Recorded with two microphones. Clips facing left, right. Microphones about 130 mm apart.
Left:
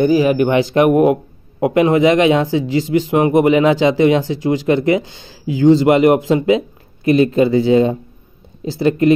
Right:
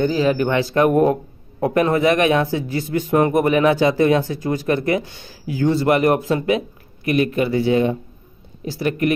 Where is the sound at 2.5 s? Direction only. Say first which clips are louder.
Left 6 dB; 90° left.